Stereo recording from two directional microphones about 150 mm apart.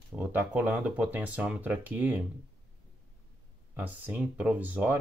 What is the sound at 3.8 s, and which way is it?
Speech, 10° right (ahead or behind).